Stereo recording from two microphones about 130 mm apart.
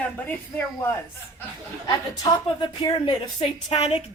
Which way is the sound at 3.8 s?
55° left (ahead or behind).